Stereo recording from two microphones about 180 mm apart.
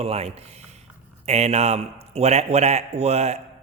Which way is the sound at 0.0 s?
35° right (ahead or behind).